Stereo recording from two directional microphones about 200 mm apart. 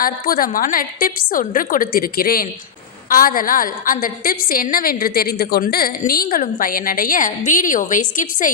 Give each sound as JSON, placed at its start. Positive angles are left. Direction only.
{"t": 0.0, "sound": "a woman's voice", "side_deg": 45}